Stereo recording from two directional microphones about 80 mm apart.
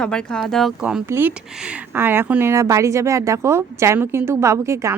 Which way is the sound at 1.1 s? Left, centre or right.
Right.